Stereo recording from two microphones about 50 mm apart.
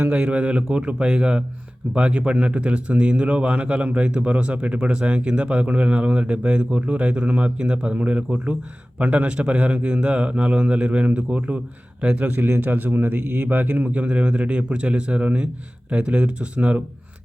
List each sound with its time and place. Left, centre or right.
0.1 s speech: right
12.4 s speech: right